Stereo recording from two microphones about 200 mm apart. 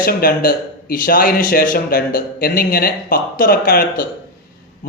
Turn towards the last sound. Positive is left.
turn(degrees=45)  # may be behind; listen again after turning